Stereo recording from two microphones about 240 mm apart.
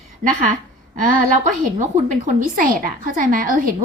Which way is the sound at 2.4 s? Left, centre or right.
Right.